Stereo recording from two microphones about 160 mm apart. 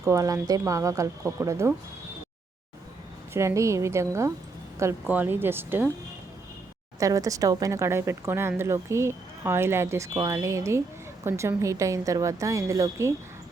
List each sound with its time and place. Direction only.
0.0 s speech: 20° right (ahead or behind)
3.3 s speech: 20° right (ahead or behind)
7.0 s speech: 20° right (ahead or behind)